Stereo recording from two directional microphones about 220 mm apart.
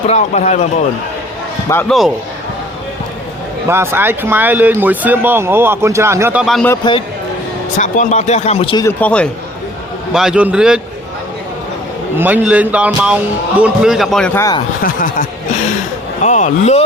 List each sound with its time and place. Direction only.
0.1 s speech: 30° left (ahead or behind)
1.7 s a man's voice: centre (ahead or behind)
3.7 s speech: 10° right (ahead or behind)
6.7 s speech: 20° left (ahead or behind)
7.8 s speech: 35° left (ahead or behind)
9.0 s a man's voice: 5° left (ahead or behind)
12.1 s a man's voice: 5° right (ahead or behind); by 14.6 s 15° left (ahead or behind)
16.2 s speech: 35° left (ahead or behind)